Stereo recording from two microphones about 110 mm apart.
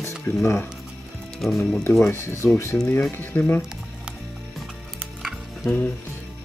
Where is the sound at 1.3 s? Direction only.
5° left (ahead or behind).